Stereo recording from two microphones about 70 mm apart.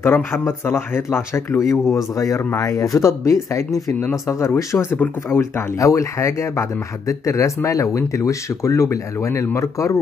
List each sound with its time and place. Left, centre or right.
0.0 s speech: left
1.6 s speech: left